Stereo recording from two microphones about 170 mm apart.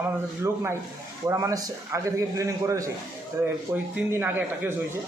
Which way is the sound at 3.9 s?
10° right (ahead or behind).